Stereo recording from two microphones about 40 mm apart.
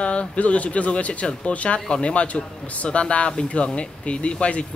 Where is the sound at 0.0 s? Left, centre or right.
Left.